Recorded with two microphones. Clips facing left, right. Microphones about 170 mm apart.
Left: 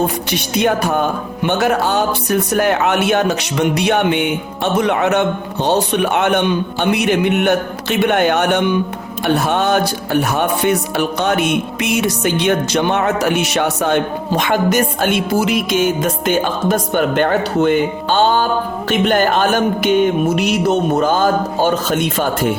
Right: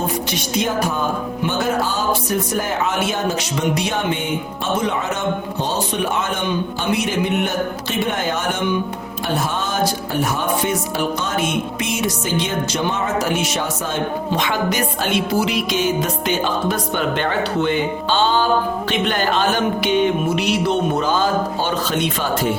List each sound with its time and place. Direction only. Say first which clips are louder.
0.3 s music: left 6 dB; 65° left (ahead or behind)
1.5 s speech: left 5 dB; 65° left (ahead or behind)
9.5 s music: left 6 dB; 65° left (ahead or behind); by 22.5 s 50° left (ahead or behind)